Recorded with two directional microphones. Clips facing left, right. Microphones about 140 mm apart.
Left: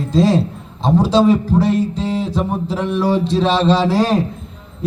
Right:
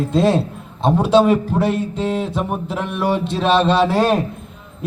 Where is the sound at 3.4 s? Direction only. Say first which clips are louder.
Right 2 dB; 5° right (ahead or behind).